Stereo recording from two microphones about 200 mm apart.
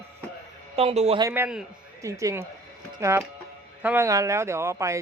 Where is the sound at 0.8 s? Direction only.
30° right (ahead or behind).